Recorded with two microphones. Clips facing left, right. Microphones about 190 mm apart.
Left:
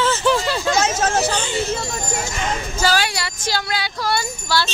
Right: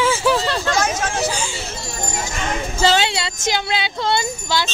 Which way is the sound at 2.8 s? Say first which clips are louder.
Right 3 dB; 25° right (ahead or behind).